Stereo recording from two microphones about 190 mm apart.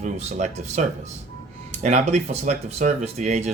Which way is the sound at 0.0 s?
35° right (ahead or behind).